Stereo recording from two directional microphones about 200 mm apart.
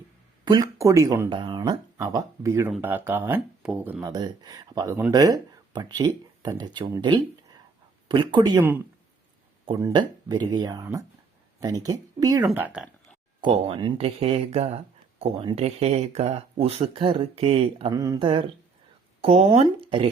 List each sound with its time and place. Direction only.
0.4 s speech: 20° right (ahead or behind)
12.5 s speech: 5° right (ahead or behind)
13.4 s speech: 30° right (ahead or behind)
17.9 s speech: 15° right (ahead or behind)